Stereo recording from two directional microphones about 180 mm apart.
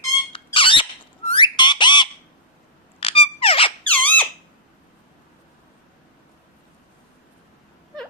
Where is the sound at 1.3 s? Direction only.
25° left (ahead or behind).